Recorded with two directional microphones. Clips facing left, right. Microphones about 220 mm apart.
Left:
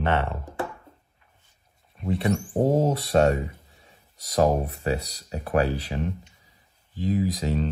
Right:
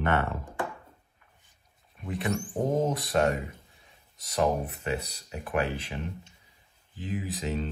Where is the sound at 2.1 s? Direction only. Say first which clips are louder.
Left 6 dB; 30° left (ahead or behind).